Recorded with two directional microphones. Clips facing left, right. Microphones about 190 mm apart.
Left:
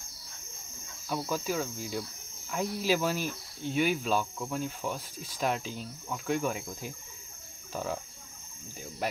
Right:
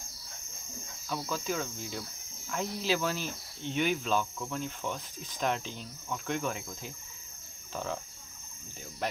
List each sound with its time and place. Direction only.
1.3 s speech: 10° left (ahead or behind)